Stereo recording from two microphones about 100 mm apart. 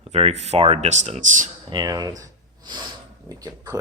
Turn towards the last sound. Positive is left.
turn(degrees=-40)  # may be behind; listen again after turning